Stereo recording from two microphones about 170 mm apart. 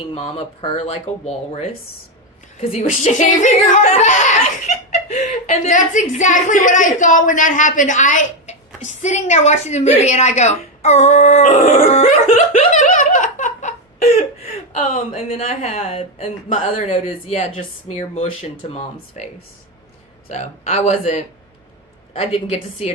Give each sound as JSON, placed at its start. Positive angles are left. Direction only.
{"t": 0.1, "sound": "speech", "side_deg": 35}